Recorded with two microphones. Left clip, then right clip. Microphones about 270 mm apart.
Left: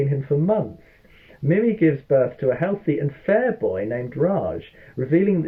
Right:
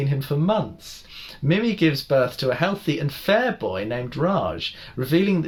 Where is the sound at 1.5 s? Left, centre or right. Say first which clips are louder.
Left 3 dB; right.